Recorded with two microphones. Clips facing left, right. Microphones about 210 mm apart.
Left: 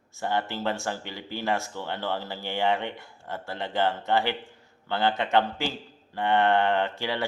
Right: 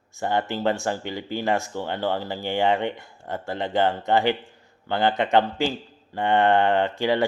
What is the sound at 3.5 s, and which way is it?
Speech, 50° right (ahead or behind).